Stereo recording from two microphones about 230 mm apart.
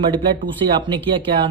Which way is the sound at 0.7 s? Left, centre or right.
Right.